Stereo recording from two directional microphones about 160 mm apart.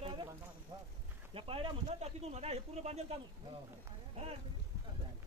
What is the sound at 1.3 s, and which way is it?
Speech, 35° right (ahead or behind).